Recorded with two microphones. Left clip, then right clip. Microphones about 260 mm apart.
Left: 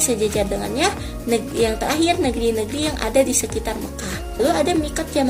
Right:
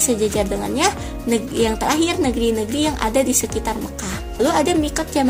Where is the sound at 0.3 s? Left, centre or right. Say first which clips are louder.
Right 1 dB; right.